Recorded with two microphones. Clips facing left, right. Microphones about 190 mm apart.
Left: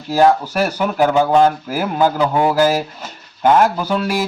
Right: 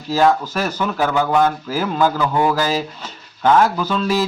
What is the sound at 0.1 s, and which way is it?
Speech, 15° left (ahead or behind).